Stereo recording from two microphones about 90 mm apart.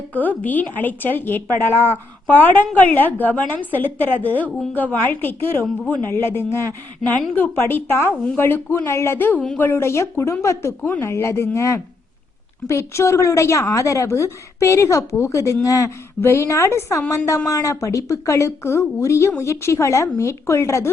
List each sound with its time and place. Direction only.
0.1 s a woman's voice: 20° left (ahead or behind)
1.7 s speech: 20° right (ahead or behind)
2.2 s a woman's voice: 20° left (ahead or behind)